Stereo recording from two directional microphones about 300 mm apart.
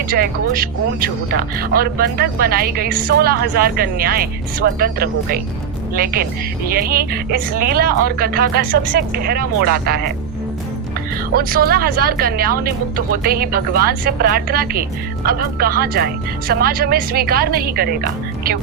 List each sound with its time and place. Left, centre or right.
0.1 s speech: right
11.3 s speech: right